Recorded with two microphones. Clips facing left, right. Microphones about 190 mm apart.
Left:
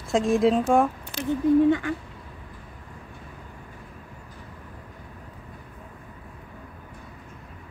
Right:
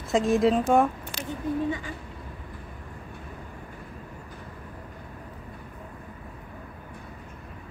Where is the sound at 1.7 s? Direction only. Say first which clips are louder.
Left 9 dB; 65° left (ahead or behind).